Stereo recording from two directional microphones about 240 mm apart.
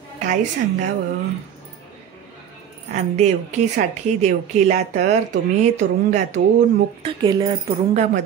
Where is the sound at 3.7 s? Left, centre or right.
Right.